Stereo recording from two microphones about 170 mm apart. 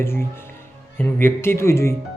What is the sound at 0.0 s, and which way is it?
Speech, 15° left (ahead or behind).